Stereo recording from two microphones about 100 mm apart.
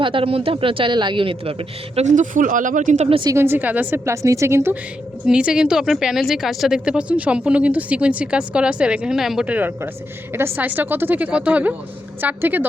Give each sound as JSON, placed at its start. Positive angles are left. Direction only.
{"t": 0.0, "sound": "a man's voice", "side_deg": -60}
{"t": 3.3, "sound": "a woman's voice", "side_deg": -20}
{"t": 5.2, "sound": "a woman's voice", "side_deg": -10}
{"t": 9.5, "sound": "a woman's voice", "side_deg": -20}